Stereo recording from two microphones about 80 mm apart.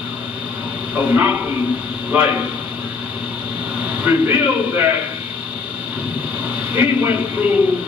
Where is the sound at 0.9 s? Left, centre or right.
Right.